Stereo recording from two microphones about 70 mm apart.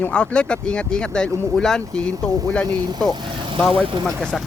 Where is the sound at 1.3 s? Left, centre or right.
Right.